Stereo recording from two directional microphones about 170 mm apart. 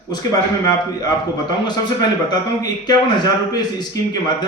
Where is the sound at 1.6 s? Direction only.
25° left (ahead or behind).